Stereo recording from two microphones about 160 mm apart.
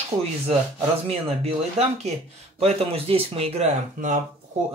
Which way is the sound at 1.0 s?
40° right (ahead or behind).